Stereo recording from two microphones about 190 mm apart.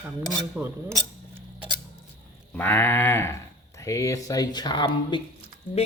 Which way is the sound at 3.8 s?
15° left (ahead or behind).